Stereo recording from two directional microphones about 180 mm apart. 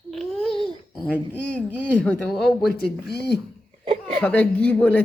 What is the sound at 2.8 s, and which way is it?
Speech, 65° left (ahead or behind).